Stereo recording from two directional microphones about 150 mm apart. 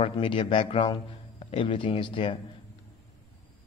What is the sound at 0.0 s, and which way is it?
A man's voice, 35° left (ahead or behind).